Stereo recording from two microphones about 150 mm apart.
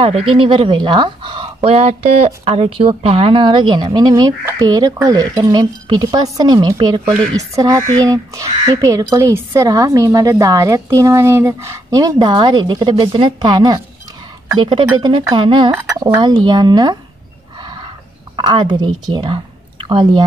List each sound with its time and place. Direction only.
0.0 s a woman's voice: 35° right (ahead or behind)
17.6 s a sound: 30° right (ahead or behind)
18.3 s a woman's voice: 30° right (ahead or behind)